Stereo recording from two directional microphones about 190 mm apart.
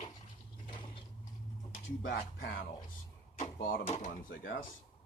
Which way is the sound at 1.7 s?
75° left (ahead or behind).